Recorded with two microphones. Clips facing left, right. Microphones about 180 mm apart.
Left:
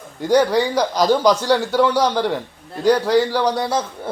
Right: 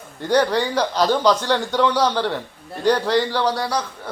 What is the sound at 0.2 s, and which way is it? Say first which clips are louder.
A man's voice: left 3 dB; 10° left (ahead or behind).